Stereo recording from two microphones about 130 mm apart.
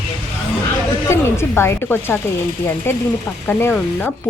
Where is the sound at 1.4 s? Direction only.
20° left (ahead or behind).